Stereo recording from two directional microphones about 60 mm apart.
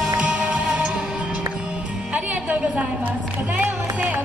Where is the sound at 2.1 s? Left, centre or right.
Right.